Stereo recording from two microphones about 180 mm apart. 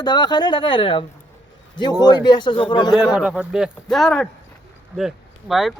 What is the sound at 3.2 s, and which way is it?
Speech, 5° right (ahead or behind).